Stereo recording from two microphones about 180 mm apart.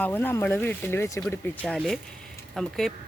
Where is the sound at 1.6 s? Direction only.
Centre (ahead or behind).